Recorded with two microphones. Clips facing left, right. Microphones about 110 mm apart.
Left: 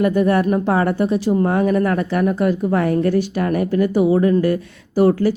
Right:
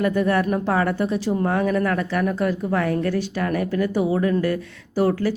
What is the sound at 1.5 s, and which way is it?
Speech, 20° left (ahead or behind).